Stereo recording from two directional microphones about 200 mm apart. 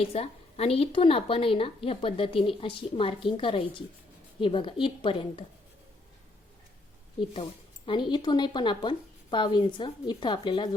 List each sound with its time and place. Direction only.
0.1 s a woman's voice: 30° left (ahead or behind)
7.9 s a woman's voice: 25° left (ahead or behind)